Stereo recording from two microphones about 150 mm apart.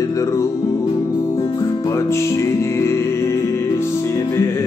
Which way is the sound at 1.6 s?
20° left (ahead or behind).